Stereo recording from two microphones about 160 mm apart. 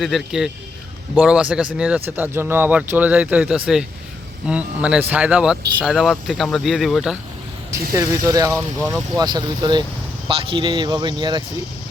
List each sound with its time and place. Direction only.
0.0 s speech: centre (ahead or behind)
7.9 s speech: 20° right (ahead or behind)
8.5 s speech: centre (ahead or behind)
9.1 s speech: 25° right (ahead or behind)